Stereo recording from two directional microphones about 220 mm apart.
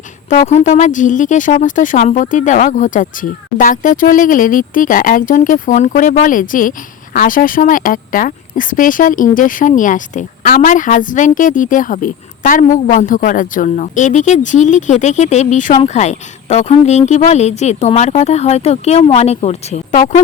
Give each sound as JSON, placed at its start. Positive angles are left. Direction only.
{"t": 0.3, "sound": "speech", "side_deg": 35}